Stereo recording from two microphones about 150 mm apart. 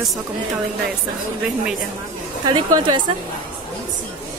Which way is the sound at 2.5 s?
30° right (ahead or behind).